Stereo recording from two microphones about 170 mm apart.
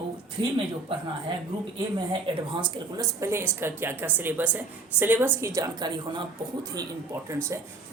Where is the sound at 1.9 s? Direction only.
30° right (ahead or behind).